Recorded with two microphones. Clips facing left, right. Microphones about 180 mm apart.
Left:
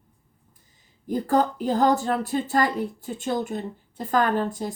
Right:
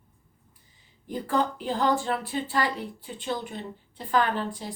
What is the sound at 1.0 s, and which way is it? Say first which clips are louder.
A woman's voice: left 5 dB; 40° left (ahead or behind).